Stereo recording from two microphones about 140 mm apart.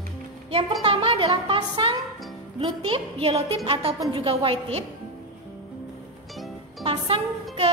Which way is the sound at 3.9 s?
25° right (ahead or behind).